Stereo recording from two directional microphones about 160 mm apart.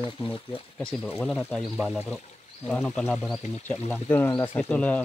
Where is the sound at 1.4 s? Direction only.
5° left (ahead or behind).